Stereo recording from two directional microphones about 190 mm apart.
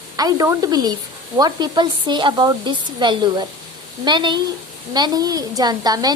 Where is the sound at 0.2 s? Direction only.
20° right (ahead or behind).